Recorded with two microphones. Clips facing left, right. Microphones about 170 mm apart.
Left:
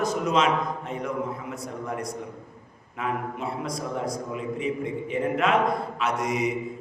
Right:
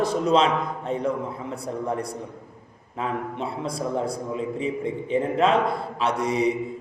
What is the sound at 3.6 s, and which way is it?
A man's voice, 30° right (ahead or behind).